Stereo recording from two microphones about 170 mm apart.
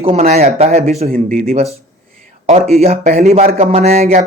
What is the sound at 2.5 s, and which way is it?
Speech, 40° right (ahead or behind).